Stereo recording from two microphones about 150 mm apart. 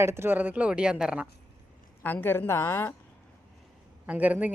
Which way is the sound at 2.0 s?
15° left (ahead or behind).